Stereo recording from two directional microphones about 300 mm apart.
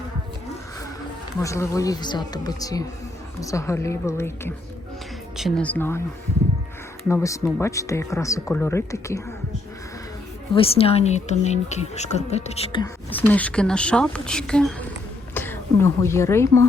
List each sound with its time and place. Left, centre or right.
1.4 s speech: centre
7.1 s speech: centre
10.5 s a woman's voice: centre
13.1 s a woman's voice: centre